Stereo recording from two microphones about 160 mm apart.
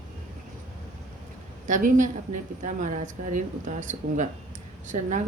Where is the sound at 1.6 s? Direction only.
55° right (ahead or behind).